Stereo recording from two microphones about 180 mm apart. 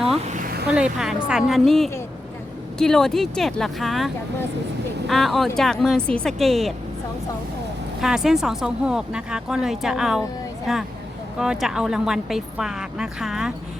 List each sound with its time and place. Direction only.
0.3 s a sound: 60° right (ahead or behind)
0.7 s speech: 5° right (ahead or behind)
8.0 s speech: 5° right (ahead or behind)